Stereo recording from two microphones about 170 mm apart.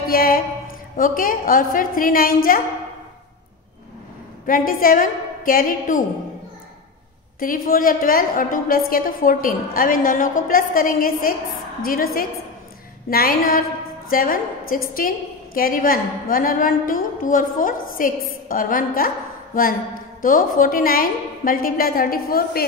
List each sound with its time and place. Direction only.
0.0 s a sound: 60° left (ahead or behind)
0.9 s a woman's voice: 55° left (ahead or behind)
4.5 s a woman's voice: 55° left (ahead or behind)
7.3 s a woman's voice: 55° left (ahead or behind)